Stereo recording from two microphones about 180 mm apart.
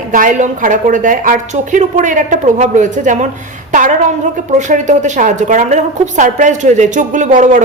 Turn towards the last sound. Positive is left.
turn(degrees=-45)  # may be behind; listen again after turning